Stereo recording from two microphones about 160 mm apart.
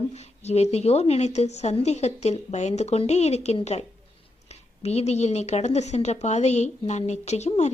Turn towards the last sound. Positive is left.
turn(degrees=45)  # may be behind; listen again after turning